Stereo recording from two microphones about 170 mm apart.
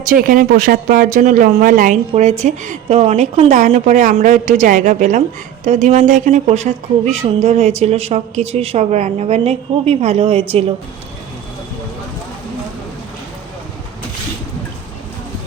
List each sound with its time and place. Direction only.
0.1 s speech: 55° right (ahead or behind); by 10.8 s 35° right (ahead or behind)